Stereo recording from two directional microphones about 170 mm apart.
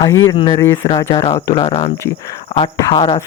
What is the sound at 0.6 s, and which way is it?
Speech, 15° left (ahead or behind).